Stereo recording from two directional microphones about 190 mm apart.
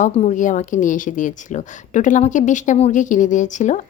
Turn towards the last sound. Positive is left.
turn(degrees=40)  # may be behind; listen again after turning